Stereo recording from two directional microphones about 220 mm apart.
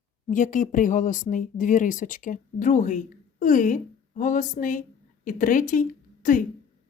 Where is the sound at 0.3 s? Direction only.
35° left (ahead or behind).